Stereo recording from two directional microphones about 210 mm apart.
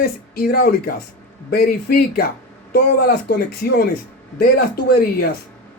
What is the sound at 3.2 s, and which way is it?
Speech, 45° left (ahead or behind).